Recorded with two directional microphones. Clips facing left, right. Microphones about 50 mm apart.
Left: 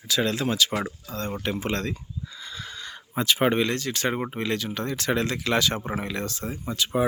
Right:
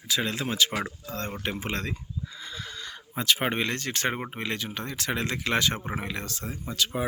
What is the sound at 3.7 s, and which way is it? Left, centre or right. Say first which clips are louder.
Speech: left 2 dB; right.